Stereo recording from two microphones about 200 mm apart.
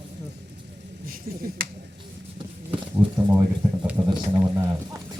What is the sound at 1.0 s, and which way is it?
Speech, 45° right (ahead or behind).